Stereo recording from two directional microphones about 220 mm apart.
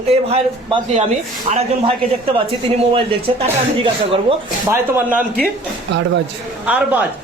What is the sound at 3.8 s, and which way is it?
Speech, 25° right (ahead or behind).